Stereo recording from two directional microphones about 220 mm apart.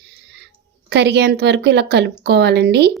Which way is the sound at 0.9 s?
50° right (ahead or behind).